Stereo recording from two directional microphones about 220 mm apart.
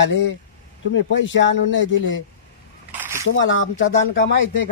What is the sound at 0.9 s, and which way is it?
Speech, 55° left (ahead or behind).